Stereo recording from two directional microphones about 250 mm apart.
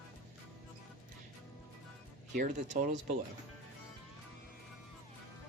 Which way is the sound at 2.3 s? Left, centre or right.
Right.